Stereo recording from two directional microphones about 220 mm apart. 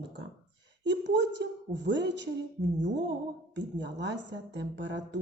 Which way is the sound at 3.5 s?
55° right (ahead or behind).